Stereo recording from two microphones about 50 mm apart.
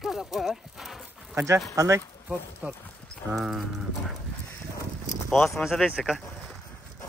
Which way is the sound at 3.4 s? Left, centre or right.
Centre.